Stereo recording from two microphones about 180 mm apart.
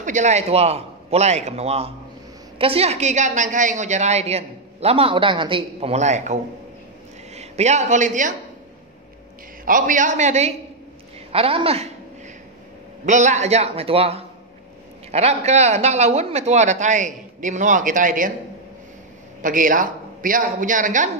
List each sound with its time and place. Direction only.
0.0 s a woman's voice: 40° right (ahead or behind)
9.7 s a man's voice: 45° right (ahead or behind)
13.0 s a woman's voice: 40° right (ahead or behind)
19.4 s a man's voice: 50° right (ahead or behind)